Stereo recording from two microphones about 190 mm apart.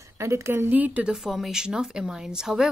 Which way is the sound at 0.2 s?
15° right (ahead or behind).